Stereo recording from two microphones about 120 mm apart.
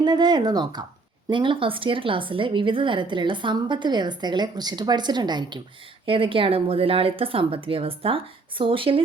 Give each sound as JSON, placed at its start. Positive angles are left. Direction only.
{"t": 0.0, "sound": "a woman's voice", "side_deg": -35}